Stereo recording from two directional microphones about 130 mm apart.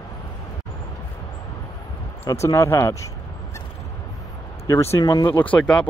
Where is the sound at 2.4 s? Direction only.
20° left (ahead or behind).